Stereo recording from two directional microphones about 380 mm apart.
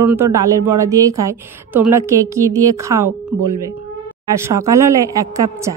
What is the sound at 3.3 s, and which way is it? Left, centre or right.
Speech, right.